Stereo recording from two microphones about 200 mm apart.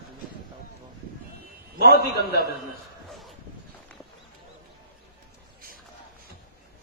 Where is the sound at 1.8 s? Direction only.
50° left (ahead or behind).